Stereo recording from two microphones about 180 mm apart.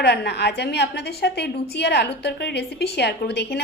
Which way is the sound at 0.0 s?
70° left (ahead or behind).